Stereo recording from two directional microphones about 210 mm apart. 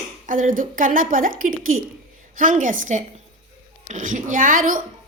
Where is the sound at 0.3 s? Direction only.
40° right (ahead or behind).